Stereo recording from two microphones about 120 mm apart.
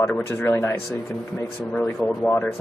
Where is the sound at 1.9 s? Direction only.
10° left (ahead or behind).